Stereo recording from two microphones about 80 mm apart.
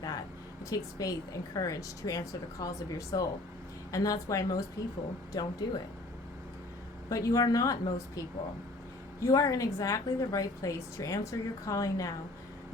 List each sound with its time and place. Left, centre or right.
0.6 s a woman's voice: left
7.1 s a woman's voice: left
9.2 s a woman's voice: left